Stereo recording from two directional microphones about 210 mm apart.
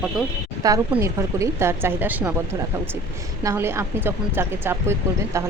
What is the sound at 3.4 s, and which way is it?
Speech, 15° right (ahead or behind).